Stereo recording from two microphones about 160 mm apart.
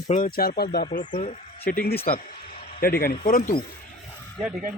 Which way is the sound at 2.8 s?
70° left (ahead or behind).